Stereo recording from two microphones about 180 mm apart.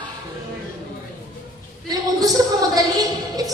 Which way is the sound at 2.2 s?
20° right (ahead or behind).